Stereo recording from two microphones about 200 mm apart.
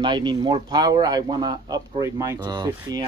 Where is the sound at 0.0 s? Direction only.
20° right (ahead or behind).